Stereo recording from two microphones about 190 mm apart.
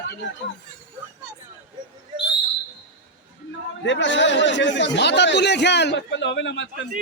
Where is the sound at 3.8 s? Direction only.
70° left (ahead or behind).